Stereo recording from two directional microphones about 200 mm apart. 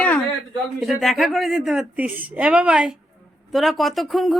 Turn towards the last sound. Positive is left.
turn(degrees=0)  # may be behind; listen again after turning